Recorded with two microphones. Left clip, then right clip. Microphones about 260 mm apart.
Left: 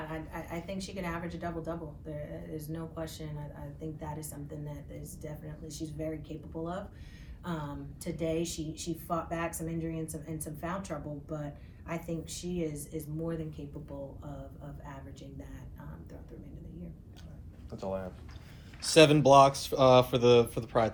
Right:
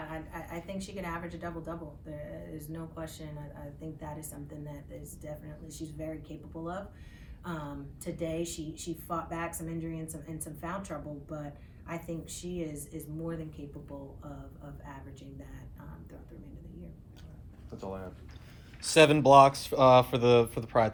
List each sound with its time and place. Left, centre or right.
0.1 s speech: centre
17.7 s speech: left
18.8 s speech: right